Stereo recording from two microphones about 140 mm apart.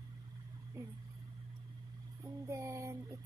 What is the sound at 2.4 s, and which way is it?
Speech, 20° right (ahead or behind).